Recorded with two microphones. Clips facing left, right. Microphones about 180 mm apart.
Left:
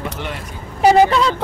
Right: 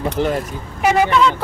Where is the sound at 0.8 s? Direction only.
35° left (ahead or behind).